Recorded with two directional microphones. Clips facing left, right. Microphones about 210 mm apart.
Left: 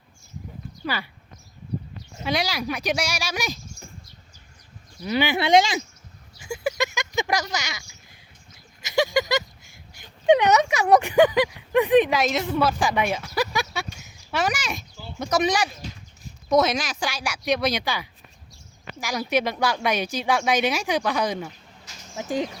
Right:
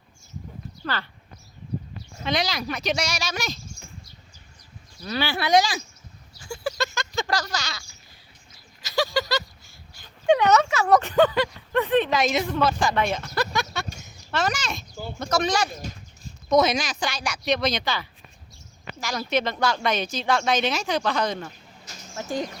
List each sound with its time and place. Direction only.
0.9 s speech: 10° left (ahead or behind)
2.2 s speech: 10° left (ahead or behind)
5.0 s speech: 15° left (ahead or behind)
6.5 s a sound: 15° left (ahead or behind)
9.0 s a sound: 20° left (ahead or behind)
10.0 s speech: 20° left (ahead or behind)
12.2 s a woman's voice: centre (ahead or behind)
12.5 s speech: 10° left (ahead or behind)
16.5 s speech: 5° left (ahead or behind)